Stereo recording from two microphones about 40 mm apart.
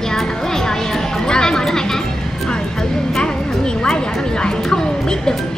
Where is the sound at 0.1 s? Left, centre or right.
Centre.